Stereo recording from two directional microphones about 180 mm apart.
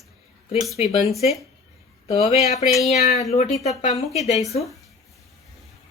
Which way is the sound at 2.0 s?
35° left (ahead or behind).